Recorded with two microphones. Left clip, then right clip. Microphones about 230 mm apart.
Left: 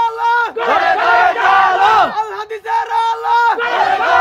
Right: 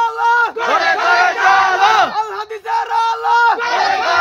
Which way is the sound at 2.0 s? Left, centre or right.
Right.